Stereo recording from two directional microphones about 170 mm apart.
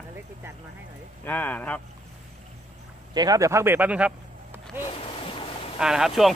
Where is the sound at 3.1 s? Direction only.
20° right (ahead or behind).